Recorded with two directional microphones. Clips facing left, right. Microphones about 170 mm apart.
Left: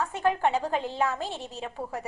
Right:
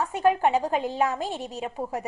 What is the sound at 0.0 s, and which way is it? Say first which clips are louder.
A woman's voice: right 3 dB; 15° right (ahead or behind).